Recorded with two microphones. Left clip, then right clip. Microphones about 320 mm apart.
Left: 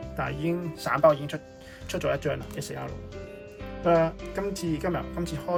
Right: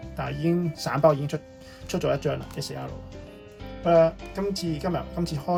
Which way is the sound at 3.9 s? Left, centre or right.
Centre.